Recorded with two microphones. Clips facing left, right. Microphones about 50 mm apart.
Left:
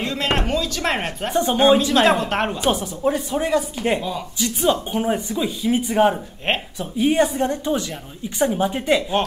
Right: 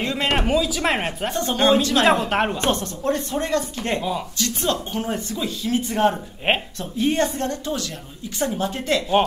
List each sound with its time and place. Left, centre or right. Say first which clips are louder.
0.0 s a sound: right 1 dB; centre
0.4 s speech: right 2 dB; centre
1.3 s speech: left 3 dB; centre
2.0 s speech: even; centre
2.7 s speech: left 2 dB; centre